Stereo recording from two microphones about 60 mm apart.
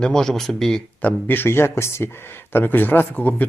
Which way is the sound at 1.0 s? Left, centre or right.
Left.